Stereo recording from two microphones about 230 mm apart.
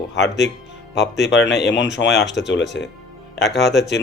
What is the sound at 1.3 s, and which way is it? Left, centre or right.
Speech, left.